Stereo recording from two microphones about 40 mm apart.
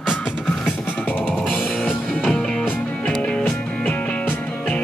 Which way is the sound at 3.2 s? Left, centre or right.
Left.